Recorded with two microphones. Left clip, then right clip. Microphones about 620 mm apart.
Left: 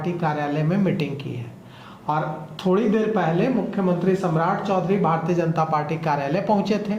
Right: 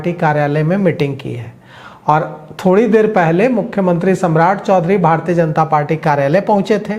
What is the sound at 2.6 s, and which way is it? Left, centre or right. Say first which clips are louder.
A man's voice: right 10 dB; right.